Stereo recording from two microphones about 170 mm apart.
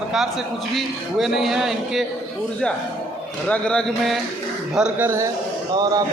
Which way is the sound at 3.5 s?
5° left (ahead or behind).